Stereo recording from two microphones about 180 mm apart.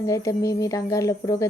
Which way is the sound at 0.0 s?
15° left (ahead or behind).